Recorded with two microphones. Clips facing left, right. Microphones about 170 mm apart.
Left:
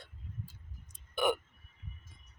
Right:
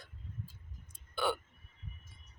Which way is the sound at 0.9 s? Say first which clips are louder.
Left 4 dB; 20° left (ahead or behind).